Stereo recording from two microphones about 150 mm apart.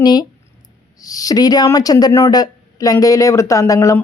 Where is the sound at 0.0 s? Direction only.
25° left (ahead or behind).